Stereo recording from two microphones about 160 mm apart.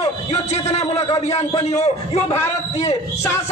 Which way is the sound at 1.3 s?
40° left (ahead or behind).